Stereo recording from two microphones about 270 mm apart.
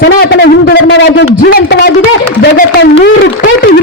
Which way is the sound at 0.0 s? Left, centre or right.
Left.